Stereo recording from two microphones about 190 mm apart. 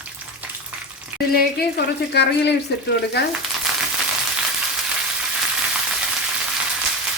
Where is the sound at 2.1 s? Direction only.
60° left (ahead or behind).